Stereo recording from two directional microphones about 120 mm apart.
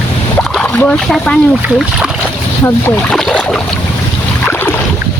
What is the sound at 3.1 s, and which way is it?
Boat, 5° left (ahead or behind).